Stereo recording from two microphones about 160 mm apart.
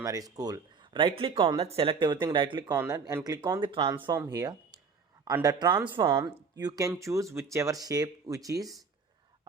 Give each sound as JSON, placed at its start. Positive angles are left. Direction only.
{"t": 0.0, "sound": "speech", "side_deg": -20}